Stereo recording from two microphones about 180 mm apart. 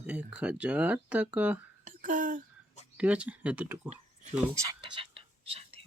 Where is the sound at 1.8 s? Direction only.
45° right (ahead or behind).